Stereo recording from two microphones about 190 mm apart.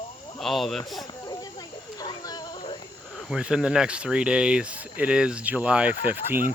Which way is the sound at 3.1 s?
5° right (ahead or behind).